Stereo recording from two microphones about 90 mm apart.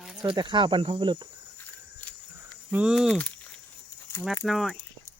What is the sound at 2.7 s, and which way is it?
Speech, 5° right (ahead or behind).